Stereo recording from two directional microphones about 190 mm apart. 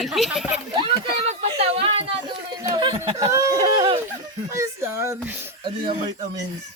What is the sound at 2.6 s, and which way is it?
Speech, 20° right (ahead or behind).